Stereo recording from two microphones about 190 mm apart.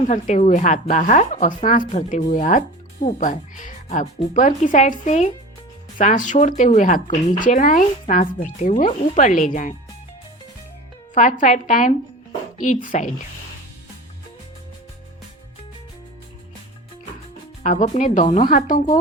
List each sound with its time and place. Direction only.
0.1 s a woman's voice: 35° left (ahead or behind)
11.1 s a woman's voice: 40° left (ahead or behind)
17.6 s a woman's voice: 40° left (ahead or behind)